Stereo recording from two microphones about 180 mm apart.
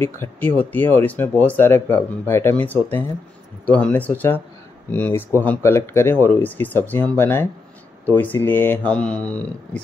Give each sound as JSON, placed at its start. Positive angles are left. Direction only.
{"t": 0.0, "sound": "speech", "side_deg": 10}